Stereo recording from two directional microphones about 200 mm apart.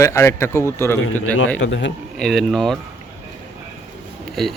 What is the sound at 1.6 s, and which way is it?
Speech, 65° left (ahead or behind).